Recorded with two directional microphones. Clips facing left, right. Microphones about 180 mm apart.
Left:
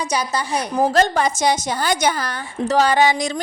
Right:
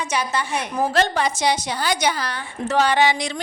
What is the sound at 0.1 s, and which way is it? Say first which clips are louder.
A woman's voice: even; 40° left (ahead or behind).